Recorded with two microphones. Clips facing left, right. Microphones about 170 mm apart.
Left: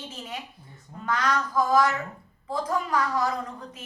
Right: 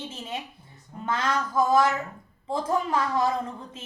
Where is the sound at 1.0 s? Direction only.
25° right (ahead or behind).